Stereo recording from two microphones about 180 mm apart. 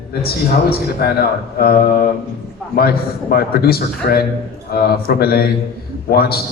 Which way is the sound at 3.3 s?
60° left (ahead or behind).